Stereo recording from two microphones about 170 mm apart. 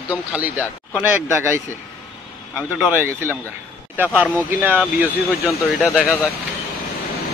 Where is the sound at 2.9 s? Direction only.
10° right (ahead or behind).